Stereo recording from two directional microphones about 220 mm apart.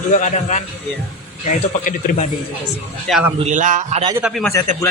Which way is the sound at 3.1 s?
5° right (ahead or behind).